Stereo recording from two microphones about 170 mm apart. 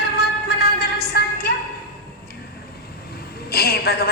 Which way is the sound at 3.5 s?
65° left (ahead or behind).